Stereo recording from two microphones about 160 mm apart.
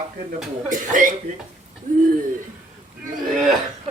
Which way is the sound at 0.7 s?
55° right (ahead or behind).